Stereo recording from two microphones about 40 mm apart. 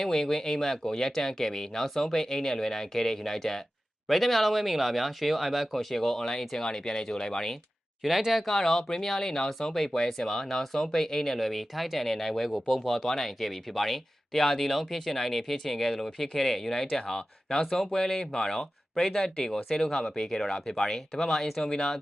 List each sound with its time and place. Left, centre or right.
0.0 s speech: centre
8.0 s speech: centre
8.4 s speech: centre